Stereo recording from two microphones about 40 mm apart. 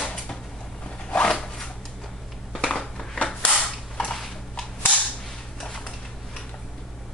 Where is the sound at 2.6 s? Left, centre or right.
Left.